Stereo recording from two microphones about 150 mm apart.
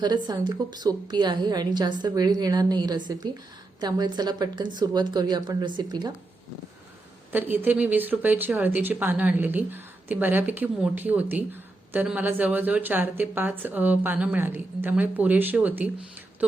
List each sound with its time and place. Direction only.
0.0 s a woman's voice: 30° right (ahead or behind)
7.3 s speech: 15° right (ahead or behind)